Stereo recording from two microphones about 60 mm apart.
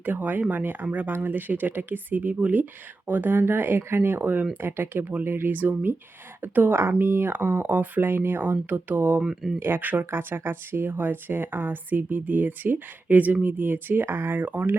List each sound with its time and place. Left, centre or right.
0.0 s speech: right
9.2 s speech: centre
9.6 s speech: right